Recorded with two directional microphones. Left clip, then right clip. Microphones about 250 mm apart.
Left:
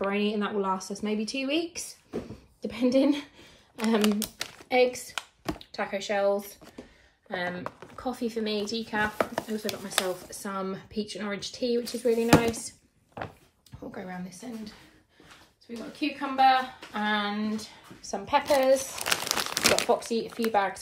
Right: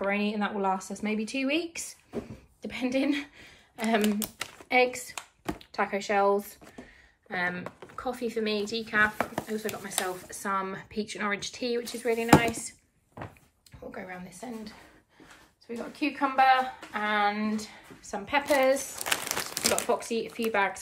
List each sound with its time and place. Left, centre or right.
0.3 s speech: centre
13.9 s speech: centre
18.5 s crumpling: centre
19.8 s speech: centre